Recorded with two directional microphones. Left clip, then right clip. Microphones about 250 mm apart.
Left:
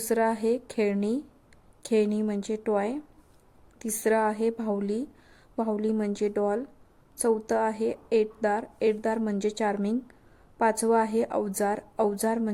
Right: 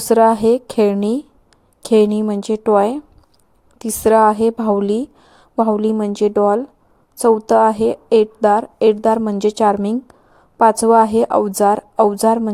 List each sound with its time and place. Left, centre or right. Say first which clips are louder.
0.1 s a woman's voice: right 14 dB; right
4.0 s a woman's voice: right 13 dB; right